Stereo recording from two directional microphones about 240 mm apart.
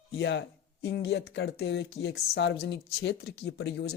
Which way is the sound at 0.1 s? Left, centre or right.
Left.